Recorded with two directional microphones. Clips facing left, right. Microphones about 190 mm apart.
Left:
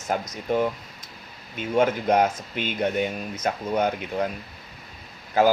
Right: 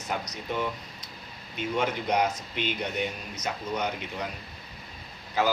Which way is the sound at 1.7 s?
50° left (ahead or behind).